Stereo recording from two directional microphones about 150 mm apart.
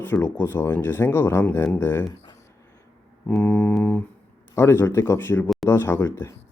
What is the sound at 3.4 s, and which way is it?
Speech, 15° left (ahead or behind).